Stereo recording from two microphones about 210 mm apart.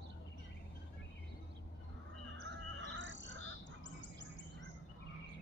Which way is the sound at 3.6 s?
35° left (ahead or behind).